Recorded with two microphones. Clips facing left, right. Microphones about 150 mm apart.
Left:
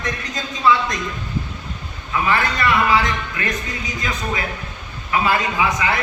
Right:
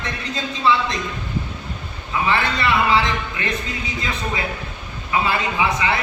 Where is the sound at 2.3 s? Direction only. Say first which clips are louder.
Left 1 dB; 25° right (ahead or behind).